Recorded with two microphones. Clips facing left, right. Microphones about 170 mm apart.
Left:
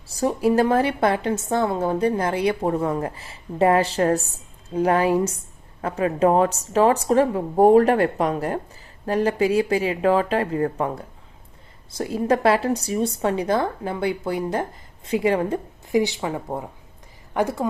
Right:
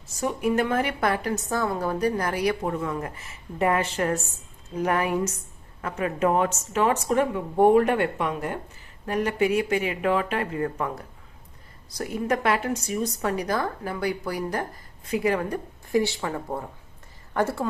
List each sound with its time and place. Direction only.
0.1 s a woman's voice: 35° left (ahead or behind); by 17.7 s 15° left (ahead or behind)